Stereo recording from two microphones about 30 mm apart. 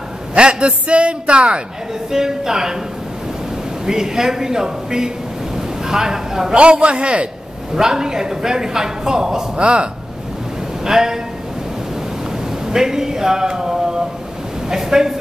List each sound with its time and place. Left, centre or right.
0.3 s a man's voice: right
2.0 s speech: centre
3.8 s a man's voice: centre
6.5 s a man's voice: right
7.7 s a man's voice: centre
9.6 s a man's voice: right
10.9 s a man's voice: centre
12.7 s speech: centre